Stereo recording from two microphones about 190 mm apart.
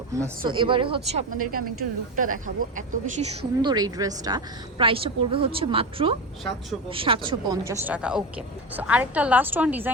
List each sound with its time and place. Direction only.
0.1 s a woman's voice: 20° right (ahead or behind)
1.3 s speech: 45° right (ahead or behind)
3.6 s a woman's voice: 20° right (ahead or behind)
7.7 s a woman's voice: 10° right (ahead or behind)